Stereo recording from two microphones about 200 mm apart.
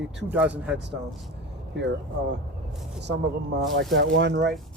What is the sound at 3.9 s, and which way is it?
Speech, 60° right (ahead or behind).